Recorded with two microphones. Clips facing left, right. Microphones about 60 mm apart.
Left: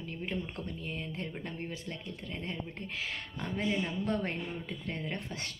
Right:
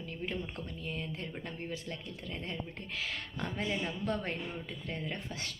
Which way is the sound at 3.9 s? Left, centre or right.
Left.